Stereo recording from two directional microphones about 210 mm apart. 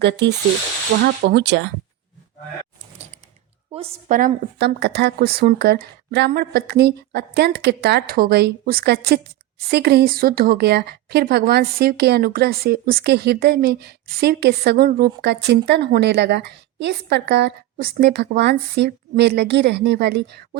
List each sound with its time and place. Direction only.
0.0 s a woman's voice: 55° right (ahead or behind)
3.7 s a sound: 30° right (ahead or behind)
4.1 s a woman's voice: 45° right (ahead or behind)